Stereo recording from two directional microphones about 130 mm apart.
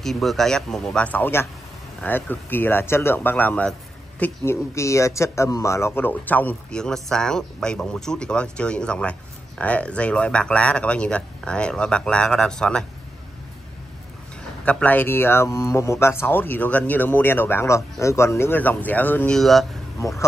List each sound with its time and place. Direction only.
0.0 s speech: centre (ahead or behind)
14.6 s speech: 10° left (ahead or behind)
20.0 s speech: 20° left (ahead or behind)